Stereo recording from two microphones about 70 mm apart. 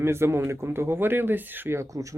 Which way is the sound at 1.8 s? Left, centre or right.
Right.